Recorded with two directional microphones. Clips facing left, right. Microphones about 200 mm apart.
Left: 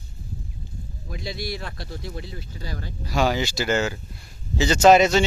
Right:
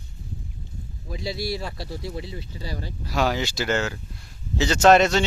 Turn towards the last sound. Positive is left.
turn(degrees=0)  # may be behind; listen again after turning